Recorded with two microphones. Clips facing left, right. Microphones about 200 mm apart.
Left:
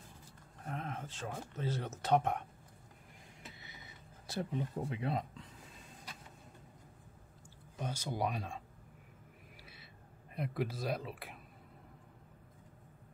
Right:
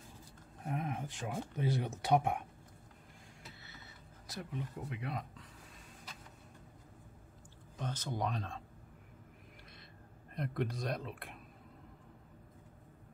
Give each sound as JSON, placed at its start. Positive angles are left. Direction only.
{"t": 0.7, "sound": "speech", "side_deg": -15}
{"t": 3.6, "sound": "a sound", "side_deg": 15}
{"t": 4.3, "sound": "speech", "side_deg": 30}
{"t": 7.7, "sound": "speech", "side_deg": 10}
{"t": 10.3, "sound": "speech", "side_deg": 5}